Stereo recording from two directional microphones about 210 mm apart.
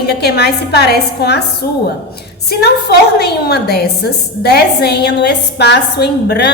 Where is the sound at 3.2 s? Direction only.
50° left (ahead or behind).